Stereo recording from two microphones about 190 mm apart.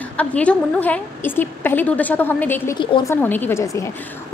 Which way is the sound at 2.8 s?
25° left (ahead or behind).